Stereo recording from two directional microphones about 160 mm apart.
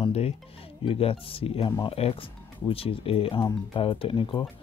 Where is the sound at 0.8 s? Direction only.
35° left (ahead or behind).